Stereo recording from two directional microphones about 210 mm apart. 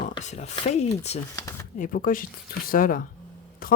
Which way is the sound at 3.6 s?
45° left (ahead or behind).